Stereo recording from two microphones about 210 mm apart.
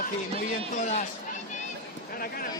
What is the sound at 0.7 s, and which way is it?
Speech, 35° left (ahead or behind).